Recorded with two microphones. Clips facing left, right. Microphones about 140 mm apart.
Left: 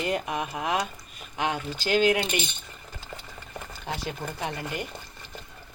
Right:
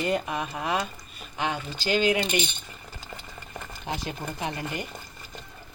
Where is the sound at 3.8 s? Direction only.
Centre (ahead or behind).